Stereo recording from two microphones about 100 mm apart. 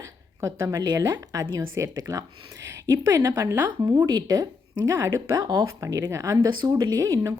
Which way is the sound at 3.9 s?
40° right (ahead or behind).